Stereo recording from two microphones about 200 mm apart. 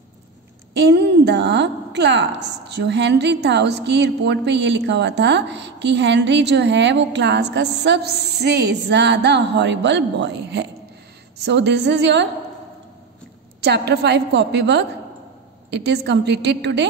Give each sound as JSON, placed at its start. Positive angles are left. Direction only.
{"t": 0.7, "sound": "a woman's voice", "side_deg": -55}
{"t": 13.6, "sound": "a woman's voice", "side_deg": -55}